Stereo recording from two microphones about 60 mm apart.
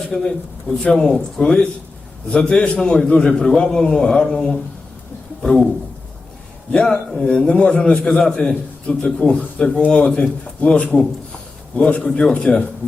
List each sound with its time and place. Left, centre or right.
0.1 s a man's voice: centre
6.7 s a man's voice: centre